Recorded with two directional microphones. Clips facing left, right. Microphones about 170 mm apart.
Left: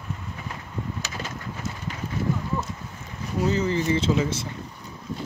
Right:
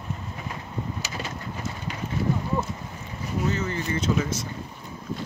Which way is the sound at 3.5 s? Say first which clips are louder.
Left 5 dB; 30° left (ahead or behind).